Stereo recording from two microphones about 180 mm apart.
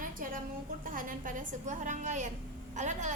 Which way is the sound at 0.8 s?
50° right (ahead or behind).